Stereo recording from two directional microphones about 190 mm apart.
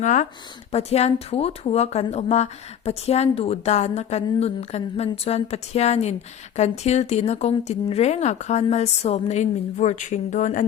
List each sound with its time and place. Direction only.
0.0 s speech: 40° left (ahead or behind)